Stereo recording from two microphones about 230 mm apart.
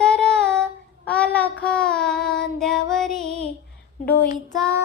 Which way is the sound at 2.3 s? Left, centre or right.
Centre.